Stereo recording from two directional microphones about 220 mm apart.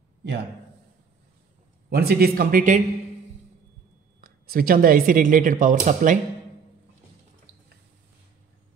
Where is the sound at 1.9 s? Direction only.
45° right (ahead or behind).